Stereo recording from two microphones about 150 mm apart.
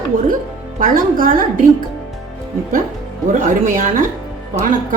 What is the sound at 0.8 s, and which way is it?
Speech, 65° right (ahead or behind).